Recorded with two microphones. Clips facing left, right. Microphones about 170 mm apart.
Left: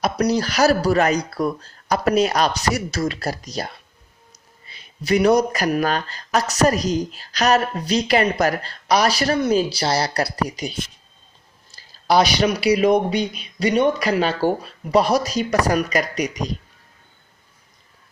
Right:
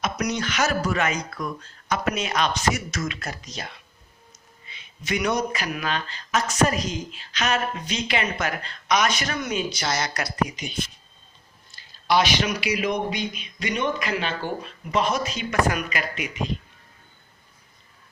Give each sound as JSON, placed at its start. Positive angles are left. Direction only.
{"t": 0.0, "sound": "speech", "side_deg": 35}